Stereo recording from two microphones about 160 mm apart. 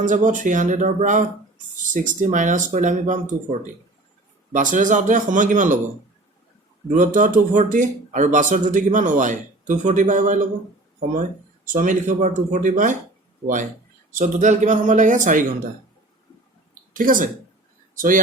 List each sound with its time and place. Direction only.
0.0 s speech: 50° right (ahead or behind)
4.5 s speech: 55° right (ahead or behind)
6.9 s speech: 55° right (ahead or behind)
14.1 s speech: 55° right (ahead or behind)
16.9 s speech: 60° right (ahead or behind)